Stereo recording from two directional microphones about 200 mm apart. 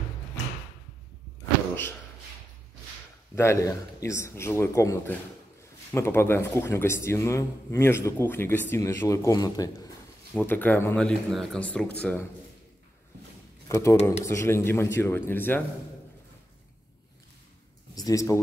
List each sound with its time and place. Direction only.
3.3 s speech: 15° left (ahead or behind)
13.7 s speech: 15° left (ahead or behind)
17.9 s speech: 15° left (ahead or behind)